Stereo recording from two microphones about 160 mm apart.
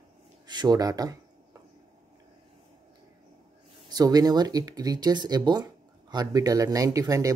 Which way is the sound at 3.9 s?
25° right (ahead or behind).